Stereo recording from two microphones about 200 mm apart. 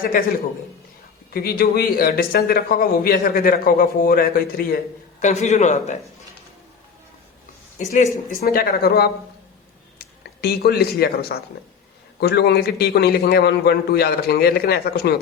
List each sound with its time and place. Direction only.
0.0 s speech: 45° left (ahead or behind)
1.3 s speech: 50° left (ahead or behind)
5.2 s a man's voice: 35° left (ahead or behind)
7.8 s speech: 40° left (ahead or behind)